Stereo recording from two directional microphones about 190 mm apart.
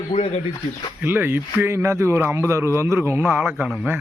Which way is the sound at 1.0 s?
10° right (ahead or behind).